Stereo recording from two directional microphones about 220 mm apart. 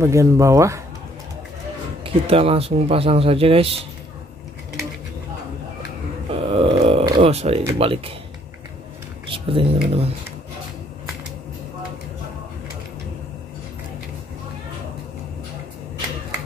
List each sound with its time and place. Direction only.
0.0 s speech: 15° right (ahead or behind)
2.0 s speech: 25° right (ahead or behind)
6.3 s music: 25° right (ahead or behind)
9.3 s speech: 25° right (ahead or behind)